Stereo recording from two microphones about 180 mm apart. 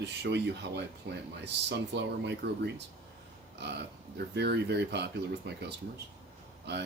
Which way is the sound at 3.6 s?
70° right (ahead or behind).